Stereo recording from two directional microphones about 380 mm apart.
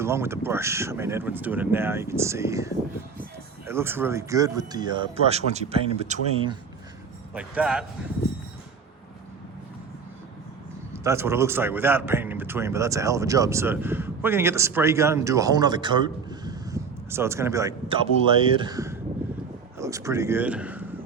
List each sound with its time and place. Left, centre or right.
0.0 s a man's voice: centre
7.3 s speech: centre
10.9 s a man's voice: centre